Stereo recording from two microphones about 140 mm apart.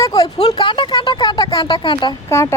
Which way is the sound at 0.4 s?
35° left (ahead or behind).